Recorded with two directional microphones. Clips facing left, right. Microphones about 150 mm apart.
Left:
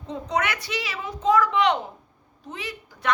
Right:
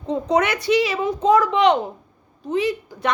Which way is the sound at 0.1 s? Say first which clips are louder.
Right 7 dB; 25° right (ahead or behind).